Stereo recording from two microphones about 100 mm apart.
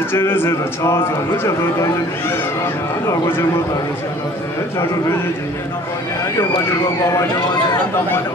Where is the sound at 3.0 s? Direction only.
20° left (ahead or behind).